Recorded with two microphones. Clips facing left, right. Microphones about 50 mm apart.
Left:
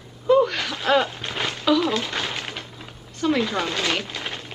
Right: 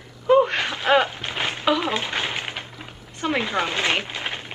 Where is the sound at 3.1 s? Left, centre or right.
Right.